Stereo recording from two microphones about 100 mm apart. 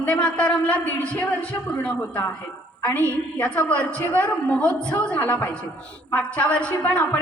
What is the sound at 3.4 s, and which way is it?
A man's voice, 15° left (ahead or behind).